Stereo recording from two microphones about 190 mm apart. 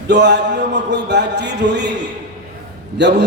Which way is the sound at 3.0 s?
65° right (ahead or behind).